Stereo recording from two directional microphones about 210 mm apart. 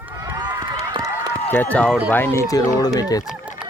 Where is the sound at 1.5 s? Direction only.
10° left (ahead or behind).